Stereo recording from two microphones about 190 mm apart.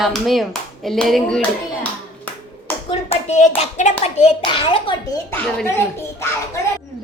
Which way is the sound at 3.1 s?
35° left (ahead or behind).